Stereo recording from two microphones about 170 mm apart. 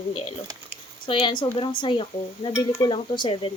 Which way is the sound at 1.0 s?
30° left (ahead or behind).